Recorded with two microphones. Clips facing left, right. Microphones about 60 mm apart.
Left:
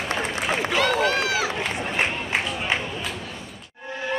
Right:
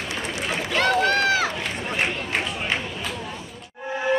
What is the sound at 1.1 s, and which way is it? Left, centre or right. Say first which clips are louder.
Run: right 3 dB; right.